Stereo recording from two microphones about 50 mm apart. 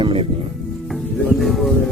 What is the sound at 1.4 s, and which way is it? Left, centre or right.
Speech, centre.